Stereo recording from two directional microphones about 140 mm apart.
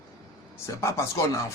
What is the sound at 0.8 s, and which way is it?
Speech, 20° left (ahead or behind).